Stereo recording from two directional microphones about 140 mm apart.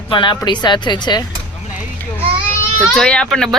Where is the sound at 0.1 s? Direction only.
35° left (ahead or behind).